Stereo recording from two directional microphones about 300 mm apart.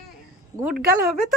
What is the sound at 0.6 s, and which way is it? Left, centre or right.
Speech, right.